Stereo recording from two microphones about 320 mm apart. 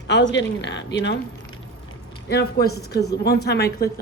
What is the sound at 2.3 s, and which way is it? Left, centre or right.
A woman's voice, left.